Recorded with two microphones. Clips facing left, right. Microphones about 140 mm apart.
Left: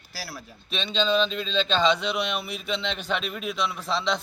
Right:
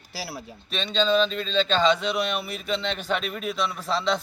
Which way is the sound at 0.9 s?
Centre (ahead or behind).